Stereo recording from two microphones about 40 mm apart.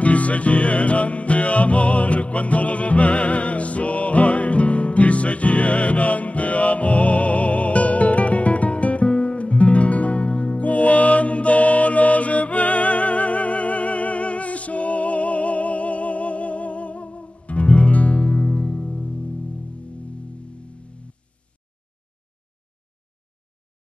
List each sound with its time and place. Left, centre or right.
0.0 s music: left